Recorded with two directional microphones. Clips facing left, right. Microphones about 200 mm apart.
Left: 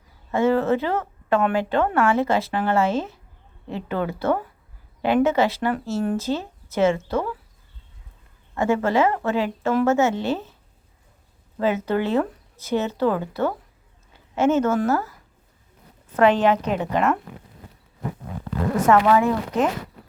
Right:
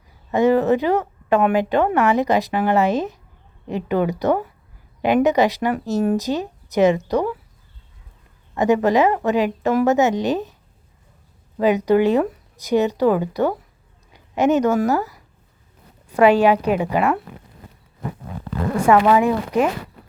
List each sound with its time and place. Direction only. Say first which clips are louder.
0.3 s a woman's voice: right 4 dB; 15° right (ahead or behind)
8.5 s a woman's voice: right 4 dB; 15° right (ahead or behind)
11.5 s a woman's voice: right 6 dB; 15° right (ahead or behind)
18.9 s a woman's voice: right 3 dB; 10° right (ahead or behind)